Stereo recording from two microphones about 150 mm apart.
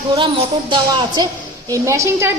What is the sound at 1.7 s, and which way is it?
Speech, 20° right (ahead or behind).